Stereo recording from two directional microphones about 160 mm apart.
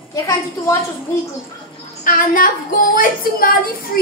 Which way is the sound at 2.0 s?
60° left (ahead or behind).